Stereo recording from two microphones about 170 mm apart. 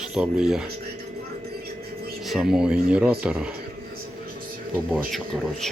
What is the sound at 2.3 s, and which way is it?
Speech, 5° right (ahead or behind).